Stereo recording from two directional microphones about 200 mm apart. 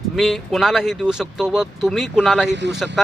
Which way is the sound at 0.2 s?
Centre (ahead or behind).